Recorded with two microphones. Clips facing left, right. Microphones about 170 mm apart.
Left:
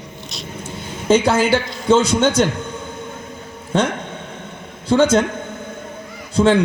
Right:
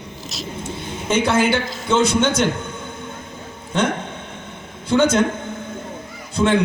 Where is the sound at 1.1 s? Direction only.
35° left (ahead or behind).